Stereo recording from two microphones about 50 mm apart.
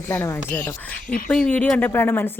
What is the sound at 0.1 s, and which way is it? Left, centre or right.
Speech, left.